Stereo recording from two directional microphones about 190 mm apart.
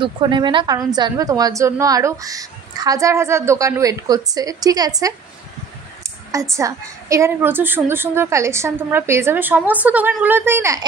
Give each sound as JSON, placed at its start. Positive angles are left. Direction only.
{"t": 0.0, "sound": "a woman's voice", "side_deg": -25}